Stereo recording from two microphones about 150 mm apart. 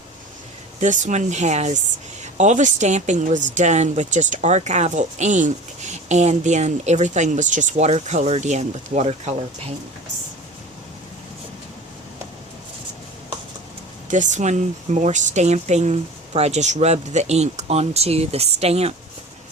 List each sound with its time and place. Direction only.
0.8 s speech: 55° right (ahead or behind)
14.1 s speech: 55° right (ahead or behind)